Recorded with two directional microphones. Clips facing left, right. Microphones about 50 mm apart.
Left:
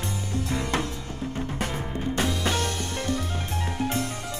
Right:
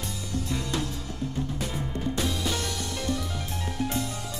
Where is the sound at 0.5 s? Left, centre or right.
Left.